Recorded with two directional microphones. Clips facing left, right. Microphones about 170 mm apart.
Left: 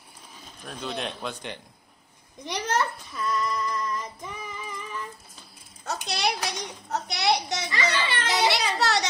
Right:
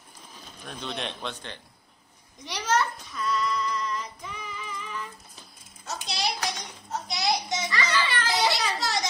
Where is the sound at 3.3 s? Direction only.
50° left (ahead or behind).